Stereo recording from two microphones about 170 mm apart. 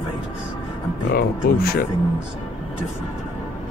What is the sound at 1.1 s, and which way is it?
Speech, 60° left (ahead or behind).